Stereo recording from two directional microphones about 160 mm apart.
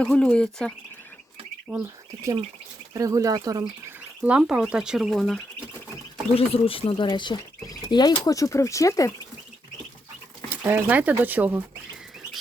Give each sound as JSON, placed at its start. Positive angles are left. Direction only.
{"t": 0.0, "sound": "speech", "side_deg": 5}
{"t": 1.7, "sound": "speech", "side_deg": -10}
{"t": 2.9, "sound": "speech", "side_deg": -20}
{"t": 3.6, "sound": "speech", "side_deg": -10}
{"t": 6.3, "sound": "speech", "side_deg": 35}
{"t": 10.5, "sound": "speech", "side_deg": -15}